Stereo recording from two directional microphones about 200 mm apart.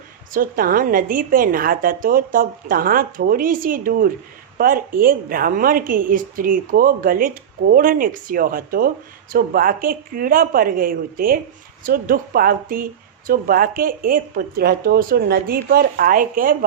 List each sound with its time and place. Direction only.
0.3 s a woman's voice: 45° right (ahead or behind)